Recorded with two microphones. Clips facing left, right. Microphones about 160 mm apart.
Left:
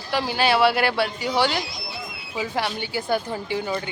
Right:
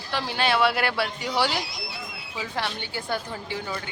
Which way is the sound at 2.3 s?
10° left (ahead or behind).